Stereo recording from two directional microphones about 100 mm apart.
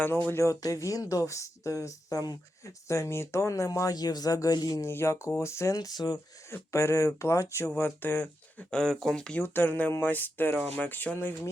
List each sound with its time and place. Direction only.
0.3 s speech: 30° left (ahead or behind)
4.9 s speech: 25° left (ahead or behind); by 6.1 s 40° left (ahead or behind)
6.5 s speech: 25° left (ahead or behind)
7.8 s speech: 20° left (ahead or behind)